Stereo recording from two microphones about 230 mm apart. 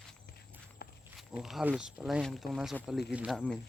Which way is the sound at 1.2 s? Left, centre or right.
Centre.